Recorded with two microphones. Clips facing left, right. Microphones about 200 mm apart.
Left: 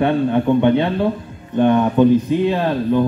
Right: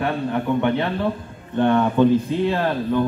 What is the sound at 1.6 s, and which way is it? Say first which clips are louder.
Speech: left 3 dB; 15° left (ahead or behind).